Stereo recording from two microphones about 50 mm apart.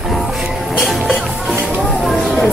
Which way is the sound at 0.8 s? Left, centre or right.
Centre.